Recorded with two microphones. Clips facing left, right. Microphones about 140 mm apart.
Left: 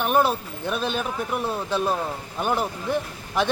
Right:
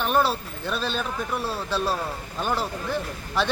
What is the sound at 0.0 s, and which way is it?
Speech, 15° left (ahead or behind).